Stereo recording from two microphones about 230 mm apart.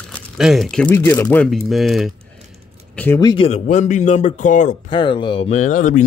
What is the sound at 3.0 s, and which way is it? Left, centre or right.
Speech, centre.